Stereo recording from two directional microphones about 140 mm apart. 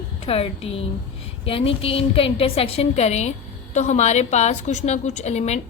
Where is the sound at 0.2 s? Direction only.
45° left (ahead or behind).